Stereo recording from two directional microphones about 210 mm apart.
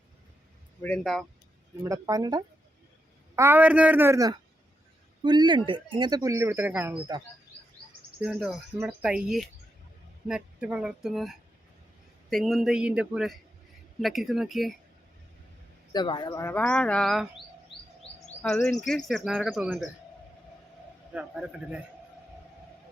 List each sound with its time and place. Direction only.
0.8 s speech: 5° left (ahead or behind)
1.8 s speech: 15° right (ahead or behind)
8.2 s speech: 5° right (ahead or behind)
15.9 s speech: 20° left (ahead or behind); by 17.2 s centre (ahead or behind)
18.4 s speech: 5° left (ahead or behind)
21.1 s speech: 5° right (ahead or behind)